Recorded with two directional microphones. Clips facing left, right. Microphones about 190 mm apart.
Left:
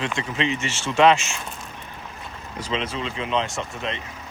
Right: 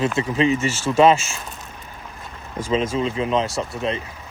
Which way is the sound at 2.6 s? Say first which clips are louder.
Right 7 dB; 45° right (ahead or behind).